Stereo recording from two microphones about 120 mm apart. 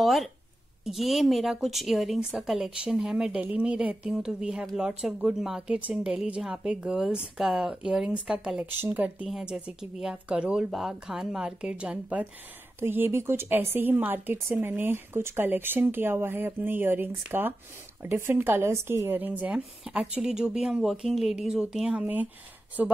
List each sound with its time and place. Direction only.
0.0 s a woman's voice: centre (ahead or behind)